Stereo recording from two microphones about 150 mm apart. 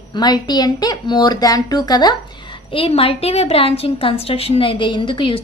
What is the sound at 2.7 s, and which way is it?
Speech, 40° left (ahead or behind).